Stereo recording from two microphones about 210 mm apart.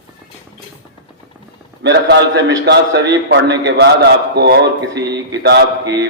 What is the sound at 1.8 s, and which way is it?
A man's voice, 55° right (ahead or behind).